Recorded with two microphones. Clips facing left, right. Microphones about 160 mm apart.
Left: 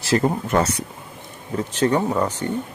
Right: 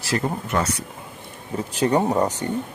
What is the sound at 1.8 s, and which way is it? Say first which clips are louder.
Speech: right 1 dB; 15° right (ahead or behind).